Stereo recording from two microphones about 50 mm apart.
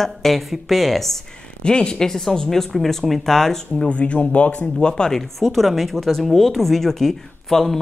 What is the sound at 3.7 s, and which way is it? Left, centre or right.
Speech, left.